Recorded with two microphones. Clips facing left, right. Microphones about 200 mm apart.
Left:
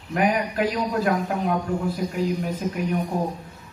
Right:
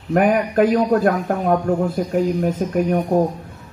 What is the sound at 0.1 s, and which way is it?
A man's voice, 50° right (ahead or behind).